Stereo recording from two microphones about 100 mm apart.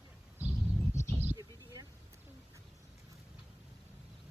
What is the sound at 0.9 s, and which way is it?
Bird, 30° left (ahead or behind).